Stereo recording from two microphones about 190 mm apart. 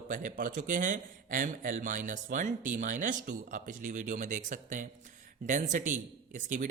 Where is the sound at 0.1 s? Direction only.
45° right (ahead or behind).